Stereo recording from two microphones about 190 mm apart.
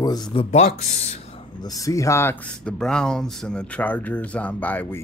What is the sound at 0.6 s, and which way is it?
Speech, 35° left (ahead or behind).